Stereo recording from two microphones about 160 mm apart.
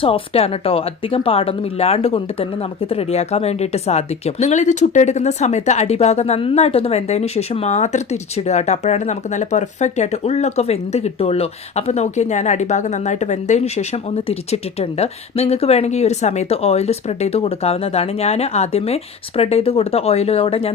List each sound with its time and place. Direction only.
0.0 s speech: 35° left (ahead or behind)